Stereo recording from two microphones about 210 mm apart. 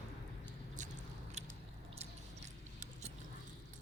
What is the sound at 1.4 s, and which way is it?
Biting, 35° right (ahead or behind).